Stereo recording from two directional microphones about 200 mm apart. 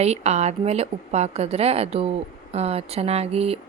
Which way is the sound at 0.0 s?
35° right (ahead or behind).